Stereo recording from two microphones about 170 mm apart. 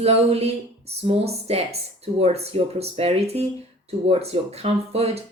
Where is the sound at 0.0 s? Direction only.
35° right (ahead or behind).